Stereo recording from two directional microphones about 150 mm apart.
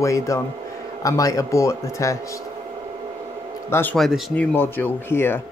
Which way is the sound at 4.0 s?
Centre (ahead or behind).